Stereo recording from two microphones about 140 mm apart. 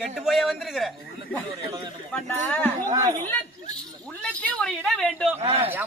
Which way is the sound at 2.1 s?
10° left (ahead or behind).